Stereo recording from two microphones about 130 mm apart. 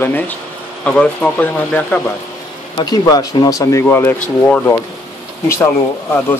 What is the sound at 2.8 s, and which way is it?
Speech, 30° left (ahead or behind).